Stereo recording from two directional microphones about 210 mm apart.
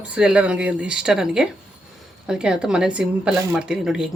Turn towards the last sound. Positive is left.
turn(degrees=-5)  # may be behind; listen again after turning